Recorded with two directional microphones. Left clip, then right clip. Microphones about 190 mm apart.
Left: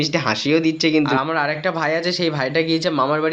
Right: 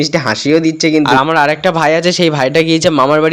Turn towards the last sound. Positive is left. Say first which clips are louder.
# right 9 dB
turn(degrees=-50)  # may be behind; listen again after turning